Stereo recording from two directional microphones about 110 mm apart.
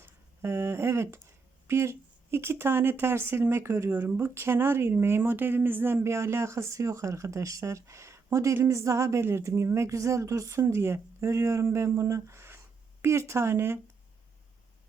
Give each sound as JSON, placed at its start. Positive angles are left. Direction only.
{"t": 0.0, "sound": "speech", "side_deg": -20}